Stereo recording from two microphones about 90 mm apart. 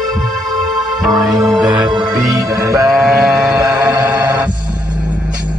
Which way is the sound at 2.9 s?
Centre (ahead or behind).